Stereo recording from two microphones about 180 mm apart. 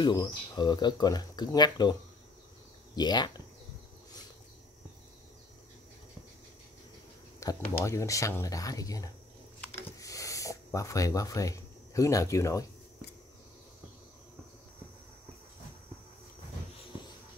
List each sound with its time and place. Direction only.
0.0 s speech: 20° left (ahead or behind)
3.0 s speech: 25° left (ahead or behind)
7.6 s speech: 15° left (ahead or behind)
9.9 s a sound: 20° left (ahead or behind)